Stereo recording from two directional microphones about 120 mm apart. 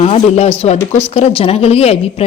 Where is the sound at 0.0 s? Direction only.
60° left (ahead or behind).